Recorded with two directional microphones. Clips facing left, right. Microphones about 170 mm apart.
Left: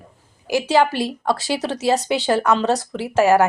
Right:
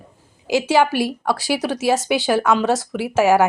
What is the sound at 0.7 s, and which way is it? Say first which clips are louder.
Speech: left 1 dB; 10° right (ahead or behind).